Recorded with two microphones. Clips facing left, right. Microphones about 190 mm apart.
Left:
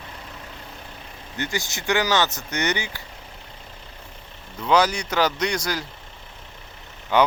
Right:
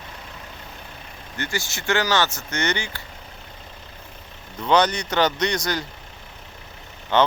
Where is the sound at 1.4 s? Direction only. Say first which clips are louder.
Left 1 dB; 15° left (ahead or behind).